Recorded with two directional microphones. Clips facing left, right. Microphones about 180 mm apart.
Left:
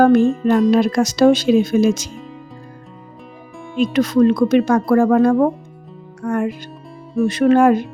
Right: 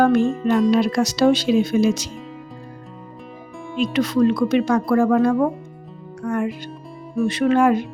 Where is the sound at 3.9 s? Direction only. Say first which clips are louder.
Left 4 dB; 45° left (ahead or behind).